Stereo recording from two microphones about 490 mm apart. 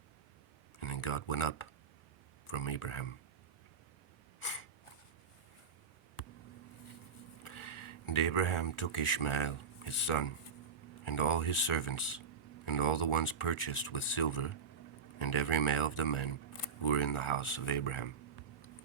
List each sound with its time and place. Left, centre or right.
0.8 s speech: left
4.4 s a sound: left
7.4 s speech: left